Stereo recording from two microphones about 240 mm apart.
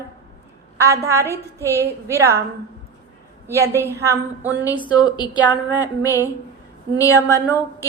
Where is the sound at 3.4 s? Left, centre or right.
Centre.